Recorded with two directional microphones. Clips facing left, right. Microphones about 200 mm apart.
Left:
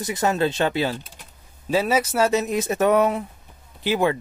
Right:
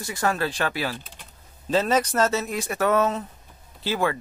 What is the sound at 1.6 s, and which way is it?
Speech, 10° left (ahead or behind).